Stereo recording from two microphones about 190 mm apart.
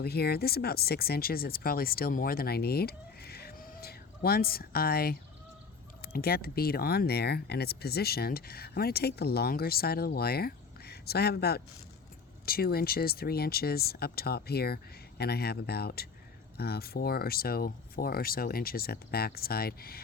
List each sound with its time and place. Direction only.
0.0 s speech: 55° left (ahead or behind)